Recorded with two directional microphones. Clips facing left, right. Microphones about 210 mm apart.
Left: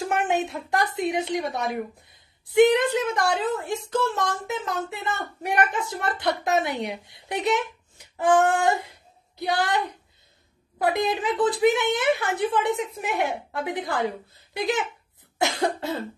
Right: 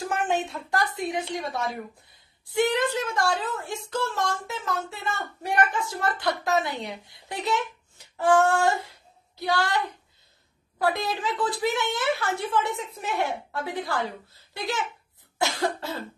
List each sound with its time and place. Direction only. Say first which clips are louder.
0.5 s a woman's voice: left 2 dB; 20° left (ahead or behind)
10.8 s a woman's voice: left 3 dB; 20° left (ahead or behind)
15.3 s cough: left 2 dB; 20° left (ahead or behind)